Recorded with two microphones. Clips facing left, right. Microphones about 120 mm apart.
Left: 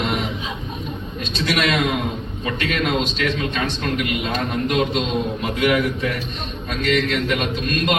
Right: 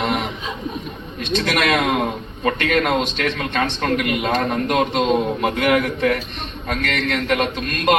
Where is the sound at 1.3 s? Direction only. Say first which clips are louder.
Right 2 dB; 55° right (ahead or behind).